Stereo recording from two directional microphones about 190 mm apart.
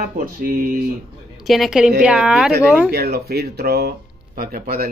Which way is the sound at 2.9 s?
55° right (ahead or behind).